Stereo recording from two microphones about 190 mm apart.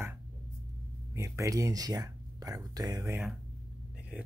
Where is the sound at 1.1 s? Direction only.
15° right (ahead or behind).